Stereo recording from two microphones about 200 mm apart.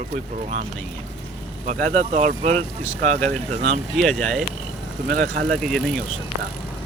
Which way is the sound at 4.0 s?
Centre (ahead or behind).